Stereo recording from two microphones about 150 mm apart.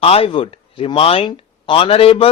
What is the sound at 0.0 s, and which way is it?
Speech, 40° left (ahead or behind).